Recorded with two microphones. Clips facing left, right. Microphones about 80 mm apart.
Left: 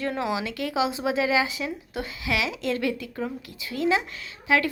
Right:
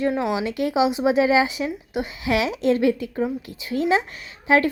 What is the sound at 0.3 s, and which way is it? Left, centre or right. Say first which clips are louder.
Speech: right 5 dB; right.